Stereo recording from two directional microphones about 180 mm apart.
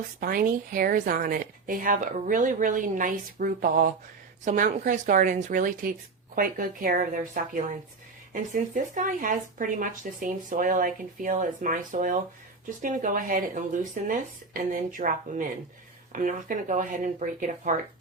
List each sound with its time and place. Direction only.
0.2 s speech: 55° right (ahead or behind)